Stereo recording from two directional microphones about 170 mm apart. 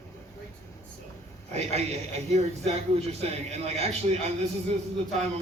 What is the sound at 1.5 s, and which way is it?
A man's voice, 40° right (ahead or behind).